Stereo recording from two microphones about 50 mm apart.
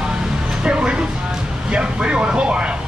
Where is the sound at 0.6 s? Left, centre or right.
Right.